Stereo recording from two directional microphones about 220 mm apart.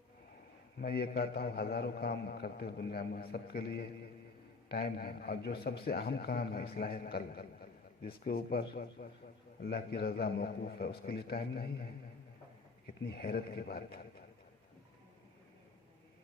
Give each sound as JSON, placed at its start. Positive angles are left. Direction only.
{"t": 0.8, "sound": "a man's voice", "side_deg": 45}
{"t": 13.1, "sound": "a man's voice", "side_deg": 45}